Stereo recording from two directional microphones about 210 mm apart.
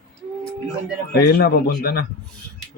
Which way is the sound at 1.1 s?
45° left (ahead or behind).